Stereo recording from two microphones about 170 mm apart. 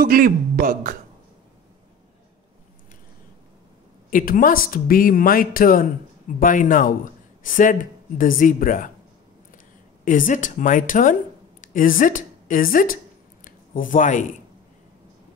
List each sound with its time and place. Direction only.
0.0 s speech: 55° right (ahead or behind)
4.1 s speech: 55° left (ahead or behind)
10.0 s speech: 50° left (ahead or behind)
11.6 s a sound: 55° left (ahead or behind)